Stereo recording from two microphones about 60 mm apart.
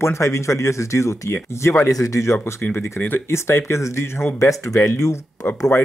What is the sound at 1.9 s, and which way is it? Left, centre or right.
Speech, left.